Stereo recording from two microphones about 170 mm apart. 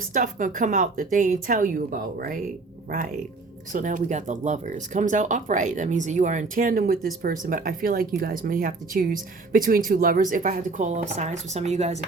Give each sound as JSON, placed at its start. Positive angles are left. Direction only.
{"t": 0.1, "sound": "speech", "side_deg": -50}
{"t": 3.7, "sound": "speech", "side_deg": -50}